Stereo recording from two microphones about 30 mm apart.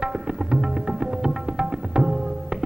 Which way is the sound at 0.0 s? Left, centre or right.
Centre.